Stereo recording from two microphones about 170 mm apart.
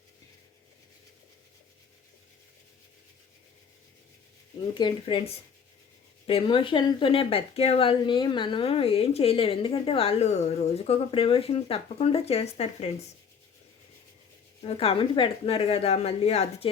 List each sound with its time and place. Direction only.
4.7 s speech: 25° left (ahead or behind)
14.6 s speech: 35° left (ahead or behind)